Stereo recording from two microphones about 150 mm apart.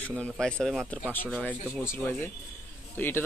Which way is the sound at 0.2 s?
5° left (ahead or behind).